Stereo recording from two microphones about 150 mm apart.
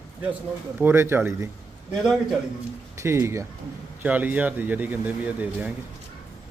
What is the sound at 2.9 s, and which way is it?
Speech, 20° right (ahead or behind).